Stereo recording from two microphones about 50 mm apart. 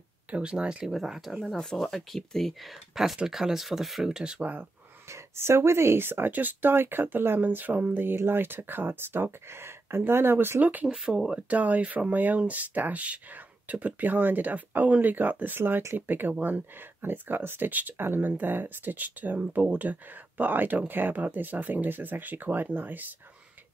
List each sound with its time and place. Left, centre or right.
0.3 s speech: right
0.8 s speech: centre
1.4 s speech: centre
2.9 s speech: centre
4.0 s speech: centre
5.1 s speech: right
10.6 s speech: right
10.9 s speech: centre
11.2 s speech: right